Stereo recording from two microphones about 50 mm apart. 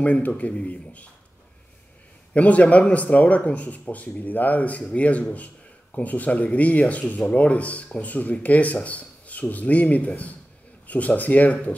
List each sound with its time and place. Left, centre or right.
0.0 s a man's voice: left
2.3 s a man's voice: left